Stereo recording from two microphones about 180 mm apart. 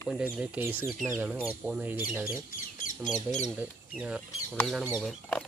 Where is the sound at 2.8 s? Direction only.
45° left (ahead or behind).